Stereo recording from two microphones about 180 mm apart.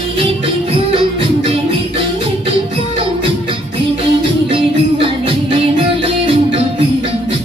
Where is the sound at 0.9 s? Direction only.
30° right (ahead or behind).